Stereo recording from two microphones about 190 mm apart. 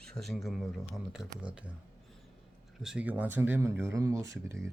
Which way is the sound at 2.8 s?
5° right (ahead or behind).